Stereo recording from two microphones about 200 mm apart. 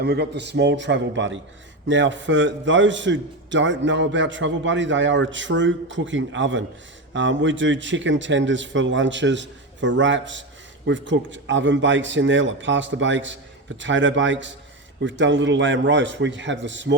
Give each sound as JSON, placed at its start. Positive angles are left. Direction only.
{"t": 0.0, "sound": "a man's voice", "side_deg": -55}